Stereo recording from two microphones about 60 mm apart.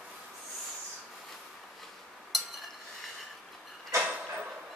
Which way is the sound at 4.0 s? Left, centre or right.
Right.